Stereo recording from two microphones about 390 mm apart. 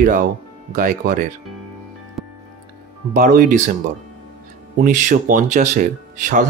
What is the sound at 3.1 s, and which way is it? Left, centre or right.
Speech, right.